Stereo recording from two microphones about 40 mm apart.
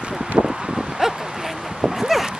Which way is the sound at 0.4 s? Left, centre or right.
Centre.